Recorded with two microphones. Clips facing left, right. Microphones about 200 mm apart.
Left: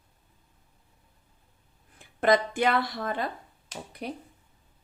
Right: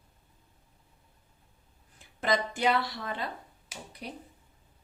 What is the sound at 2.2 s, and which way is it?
A woman's voice, 55° left (ahead or behind).